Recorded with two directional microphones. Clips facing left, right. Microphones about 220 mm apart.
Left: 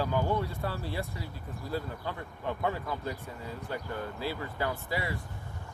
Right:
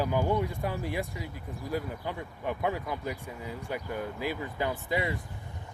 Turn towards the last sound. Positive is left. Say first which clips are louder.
# right 3 dB
turn(degrees=-20)  # may be behind; listen again after turning